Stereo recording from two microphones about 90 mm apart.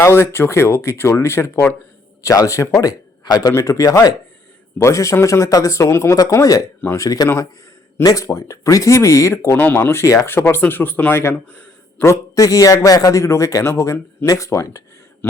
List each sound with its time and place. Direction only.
0.0 s a man's voice: 30° left (ahead or behind)
3.2 s speech: 50° left (ahead or behind)
3.5 s a man's voice: 35° left (ahead or behind)
9.3 s a man's voice: 25° left (ahead or behind)